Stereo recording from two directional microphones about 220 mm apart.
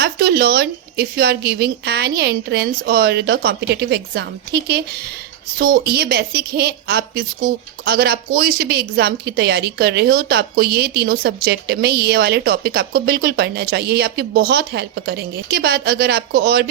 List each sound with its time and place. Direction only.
0.0 s a woman's voice: 45° right (ahead or behind)